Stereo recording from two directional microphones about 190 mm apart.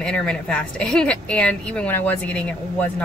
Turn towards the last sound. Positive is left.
turn(degrees=5)  # may be behind; listen again after turning